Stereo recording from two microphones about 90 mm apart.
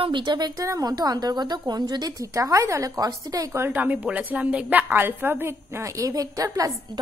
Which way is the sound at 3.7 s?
20° right (ahead or behind).